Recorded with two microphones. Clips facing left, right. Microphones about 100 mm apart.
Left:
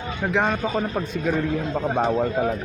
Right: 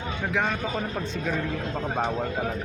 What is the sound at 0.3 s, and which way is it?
Speech, 30° left (ahead or behind).